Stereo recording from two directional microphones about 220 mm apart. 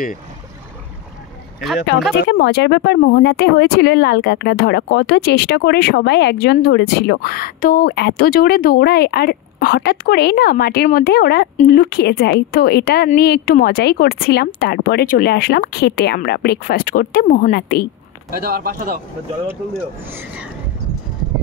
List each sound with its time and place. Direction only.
2.1 s speech: 50° left (ahead or behind)
18.4 s speech: 40° right (ahead or behind)
20.1 s speech: 10° right (ahead or behind)